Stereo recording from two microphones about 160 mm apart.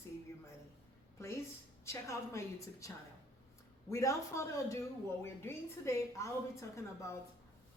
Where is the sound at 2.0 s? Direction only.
20° left (ahead or behind).